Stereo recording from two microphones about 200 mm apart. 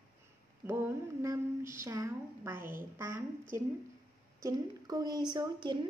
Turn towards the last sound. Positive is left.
turn(degrees=-25)  # may be behind; listen again after turning